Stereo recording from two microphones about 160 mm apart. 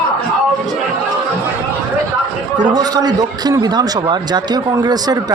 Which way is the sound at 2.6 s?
25° right (ahead or behind).